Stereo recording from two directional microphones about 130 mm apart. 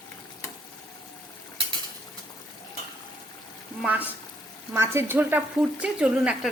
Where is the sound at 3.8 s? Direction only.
10° right (ahead or behind).